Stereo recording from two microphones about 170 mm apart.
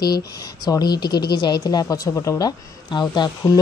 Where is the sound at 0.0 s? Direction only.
20° left (ahead or behind).